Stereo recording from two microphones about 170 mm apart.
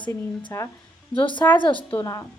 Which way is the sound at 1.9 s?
20° left (ahead or behind).